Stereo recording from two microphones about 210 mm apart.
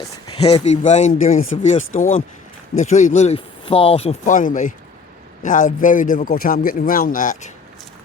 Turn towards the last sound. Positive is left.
turn(degrees=35)  # may be behind; listen again after turning